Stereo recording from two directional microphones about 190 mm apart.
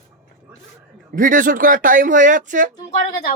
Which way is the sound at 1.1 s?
45° right (ahead or behind).